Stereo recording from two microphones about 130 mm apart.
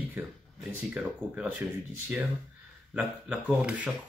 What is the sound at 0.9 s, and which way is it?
Speech, 10° right (ahead or behind).